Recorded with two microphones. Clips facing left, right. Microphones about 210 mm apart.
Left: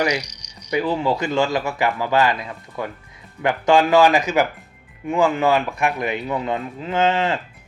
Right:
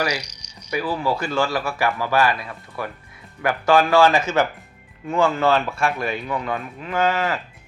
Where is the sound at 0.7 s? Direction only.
25° left (ahead or behind).